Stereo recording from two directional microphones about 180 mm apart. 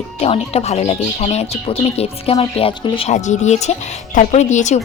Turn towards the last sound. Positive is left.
turn(degrees=40)  # may be behind; listen again after turning